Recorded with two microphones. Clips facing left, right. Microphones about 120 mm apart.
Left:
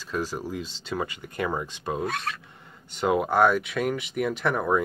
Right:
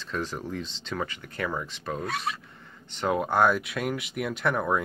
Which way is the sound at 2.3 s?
15° right (ahead or behind).